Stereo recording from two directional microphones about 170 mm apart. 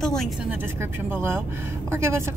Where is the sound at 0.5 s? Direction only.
15° right (ahead or behind).